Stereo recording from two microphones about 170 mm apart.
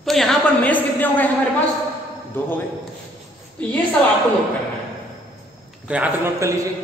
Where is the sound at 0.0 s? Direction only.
Centre (ahead or behind).